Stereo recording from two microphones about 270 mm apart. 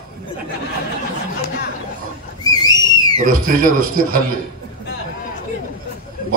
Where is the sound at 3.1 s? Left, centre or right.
Right.